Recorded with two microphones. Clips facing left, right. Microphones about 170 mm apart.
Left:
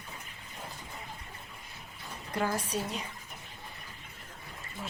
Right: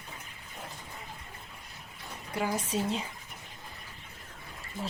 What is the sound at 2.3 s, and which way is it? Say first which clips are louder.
Speech: even; 10° right (ahead or behind).